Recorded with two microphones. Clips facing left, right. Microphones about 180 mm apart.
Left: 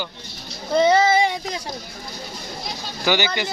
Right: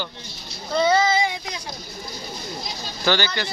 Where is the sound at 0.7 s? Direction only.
20° left (ahead or behind).